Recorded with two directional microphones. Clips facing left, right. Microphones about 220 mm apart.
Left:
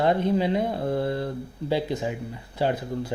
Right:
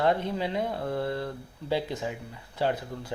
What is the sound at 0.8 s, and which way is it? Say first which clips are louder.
Speech: left 4 dB; 25° left (ahead or behind).